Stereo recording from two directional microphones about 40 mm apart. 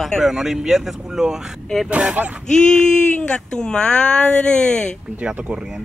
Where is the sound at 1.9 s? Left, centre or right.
Right.